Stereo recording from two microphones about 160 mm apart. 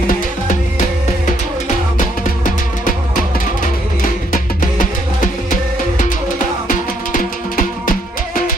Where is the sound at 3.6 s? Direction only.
55° left (ahead or behind).